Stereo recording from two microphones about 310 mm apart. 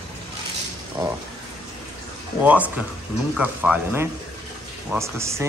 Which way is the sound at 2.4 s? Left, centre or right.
Centre.